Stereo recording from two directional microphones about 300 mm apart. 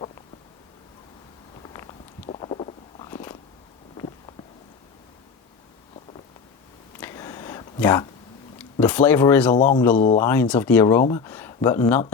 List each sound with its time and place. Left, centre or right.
2.2 s stomach rumble: centre
7.0 s a sound: centre
8.5 s speech: centre
9.6 s speech: left
10.2 s speech: centre